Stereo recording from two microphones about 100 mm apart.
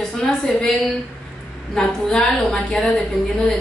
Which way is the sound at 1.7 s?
5° left (ahead or behind).